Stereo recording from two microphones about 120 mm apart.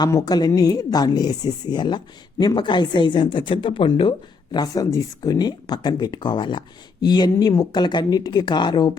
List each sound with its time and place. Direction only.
0.0 s speech: 30° left (ahead or behind)
4.5 s speech: 30° left (ahead or behind)